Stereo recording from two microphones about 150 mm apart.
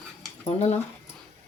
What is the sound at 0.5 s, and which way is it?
Speech, 45° left (ahead or behind).